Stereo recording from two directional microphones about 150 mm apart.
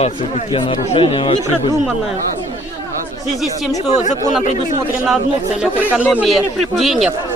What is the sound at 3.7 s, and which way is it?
Speech, 50° left (ahead or behind).